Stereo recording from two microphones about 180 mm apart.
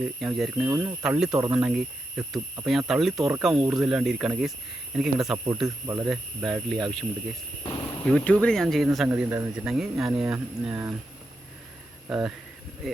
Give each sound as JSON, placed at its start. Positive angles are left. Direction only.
{"t": 0.0, "sound": "speech", "side_deg": -5}
{"t": 0.6, "sound": "speech", "side_deg": -15}
{"t": 1.0, "sound": "speech", "side_deg": -5}
{"t": 5.6, "sound": "speech", "side_deg": -15}
{"t": 6.1, "sound": "speech", "side_deg": 0}
{"t": 9.0, "sound": "speech", "side_deg": -10}
{"t": 9.6, "sound": "speech", "side_deg": 0}
{"t": 12.0, "sound": "speech", "side_deg": -5}